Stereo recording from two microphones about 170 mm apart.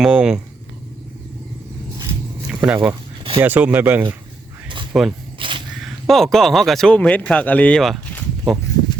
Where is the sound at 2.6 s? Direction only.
10° right (ahead or behind).